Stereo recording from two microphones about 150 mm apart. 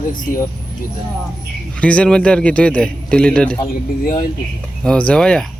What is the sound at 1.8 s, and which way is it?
A man's voice, 10° left (ahead or behind).